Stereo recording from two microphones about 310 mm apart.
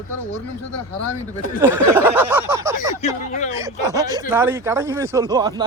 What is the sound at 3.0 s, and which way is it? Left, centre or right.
Speech, left.